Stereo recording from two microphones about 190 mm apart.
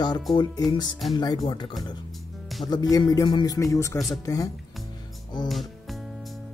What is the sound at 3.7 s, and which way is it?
Speech, 15° left (ahead or behind).